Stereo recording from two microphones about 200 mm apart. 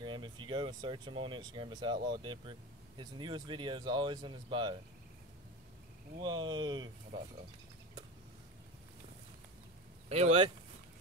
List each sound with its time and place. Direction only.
0.0 s speech: 25° right (ahead or behind)
6.1 s speech: 20° right (ahead or behind)
10.0 s speech: 30° right (ahead or behind)